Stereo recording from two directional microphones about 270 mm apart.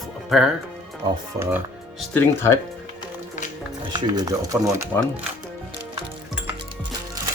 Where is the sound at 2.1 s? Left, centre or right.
Centre.